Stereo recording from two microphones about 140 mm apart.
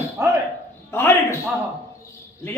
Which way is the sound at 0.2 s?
20° right (ahead or behind).